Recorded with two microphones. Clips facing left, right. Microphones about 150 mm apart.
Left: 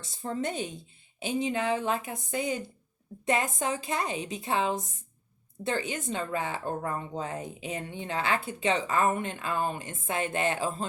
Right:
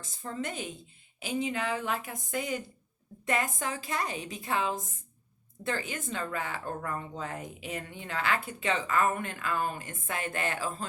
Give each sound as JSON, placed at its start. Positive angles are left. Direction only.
{"t": 0.2, "sound": "a woman's voice", "side_deg": 30}
{"t": 1.2, "sound": "speech", "side_deg": 25}